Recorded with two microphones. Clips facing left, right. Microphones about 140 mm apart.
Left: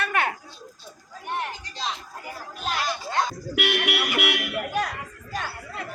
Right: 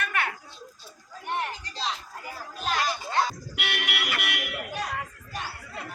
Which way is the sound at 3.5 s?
60° left (ahead or behind).